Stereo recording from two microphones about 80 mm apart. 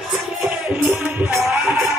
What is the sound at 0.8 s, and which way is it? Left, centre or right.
Music, right.